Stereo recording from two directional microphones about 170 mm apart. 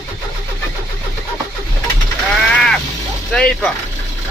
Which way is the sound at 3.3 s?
5° left (ahead or behind).